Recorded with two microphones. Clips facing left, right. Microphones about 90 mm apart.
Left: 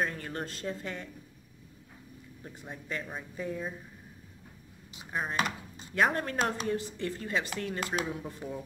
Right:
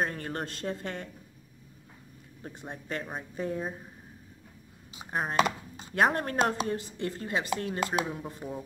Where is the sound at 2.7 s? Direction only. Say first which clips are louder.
Right 2 dB; 45° right (ahead or behind).